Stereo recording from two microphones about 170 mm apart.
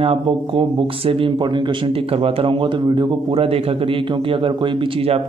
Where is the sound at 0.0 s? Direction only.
35° right (ahead or behind).